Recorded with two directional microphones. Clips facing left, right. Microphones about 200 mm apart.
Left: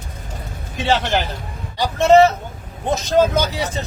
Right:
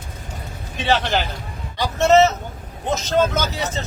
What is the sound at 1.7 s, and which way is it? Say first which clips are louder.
Speech: left 3 dB; 10° left (ahead or behind).